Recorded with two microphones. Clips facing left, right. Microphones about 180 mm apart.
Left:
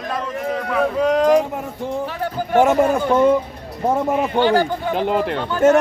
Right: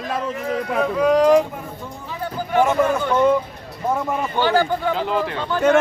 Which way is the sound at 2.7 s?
40° left (ahead or behind).